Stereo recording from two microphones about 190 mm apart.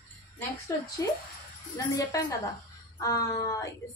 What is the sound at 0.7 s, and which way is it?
A woman's voice, 15° left (ahead or behind).